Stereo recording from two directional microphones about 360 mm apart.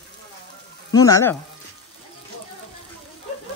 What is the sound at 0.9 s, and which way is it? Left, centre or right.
Speech, centre.